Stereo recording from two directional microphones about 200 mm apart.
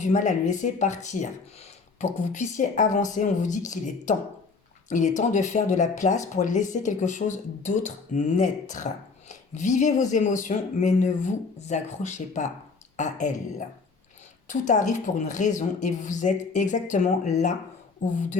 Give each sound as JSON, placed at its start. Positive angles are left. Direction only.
{"t": 0.0, "sound": "speech", "side_deg": 40}